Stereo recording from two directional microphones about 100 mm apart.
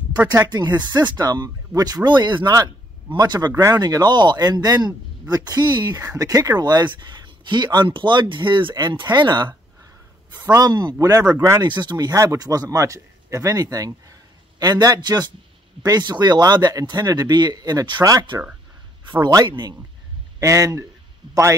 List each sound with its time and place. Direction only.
0.2 s speech: 15° right (ahead or behind)
0.5 s speech: 45° right (ahead or behind)
10.5 s speech: 40° right (ahead or behind)
11.6 s speech: 50° right (ahead or behind)
19.2 s speech: 45° right (ahead or behind)
20.3 s speech: 30° right (ahead or behind)